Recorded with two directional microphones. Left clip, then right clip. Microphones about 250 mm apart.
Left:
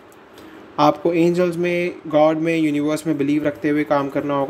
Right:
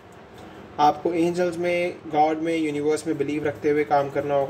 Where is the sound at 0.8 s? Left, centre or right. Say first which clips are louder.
Left 4 dB; left.